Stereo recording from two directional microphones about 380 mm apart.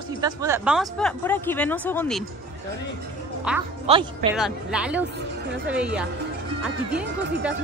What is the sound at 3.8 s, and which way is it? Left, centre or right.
Speech, centre.